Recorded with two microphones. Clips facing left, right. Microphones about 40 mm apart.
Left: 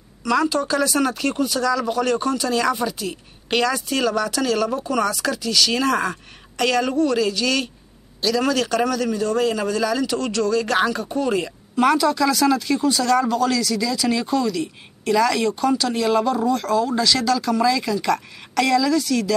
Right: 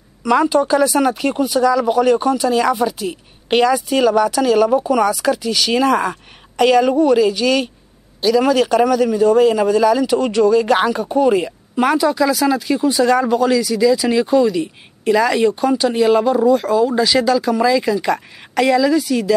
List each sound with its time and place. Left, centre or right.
0.2 s speech: right